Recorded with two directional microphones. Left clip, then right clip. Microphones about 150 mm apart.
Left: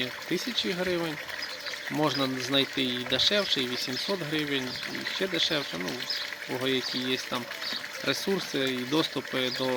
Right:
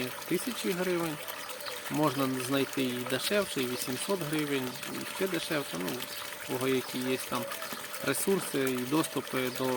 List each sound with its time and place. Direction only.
0.8 s speech: centre (ahead or behind)
6.5 s speech: centre (ahead or behind)